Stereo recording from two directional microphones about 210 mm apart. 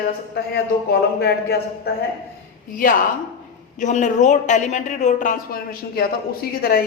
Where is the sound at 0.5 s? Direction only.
50° left (ahead or behind).